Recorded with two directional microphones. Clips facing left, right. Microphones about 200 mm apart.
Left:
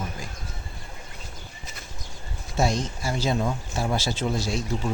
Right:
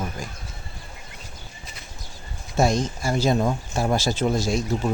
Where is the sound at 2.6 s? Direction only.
50° right (ahead or behind).